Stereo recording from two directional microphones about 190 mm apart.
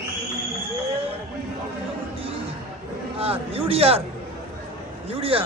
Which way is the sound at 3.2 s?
30° right (ahead or behind).